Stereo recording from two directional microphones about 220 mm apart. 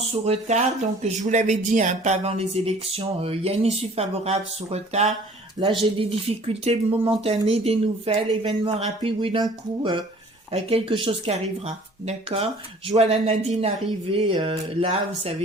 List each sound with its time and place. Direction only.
0.0 s speech: 30° right (ahead or behind)
10.5 s speech: 25° right (ahead or behind)